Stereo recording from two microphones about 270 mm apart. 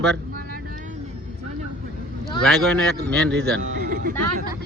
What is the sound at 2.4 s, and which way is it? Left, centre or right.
Speech, centre.